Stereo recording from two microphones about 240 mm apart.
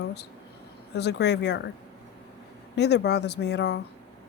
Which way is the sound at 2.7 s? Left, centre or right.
Left.